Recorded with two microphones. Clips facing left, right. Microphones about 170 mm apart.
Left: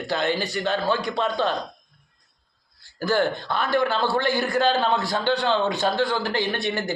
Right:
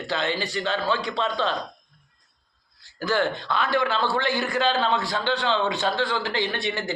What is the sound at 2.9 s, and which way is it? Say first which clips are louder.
Speech: left 2 dB; 40° left (ahead or behind).